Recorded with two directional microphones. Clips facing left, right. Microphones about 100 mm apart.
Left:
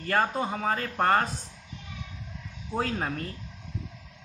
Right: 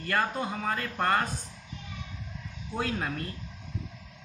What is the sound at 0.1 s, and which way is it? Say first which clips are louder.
Speech: left 3 dB; 30° left (ahead or behind).